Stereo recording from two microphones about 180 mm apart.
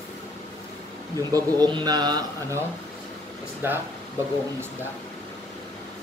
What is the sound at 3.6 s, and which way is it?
Speech, 15° right (ahead or behind).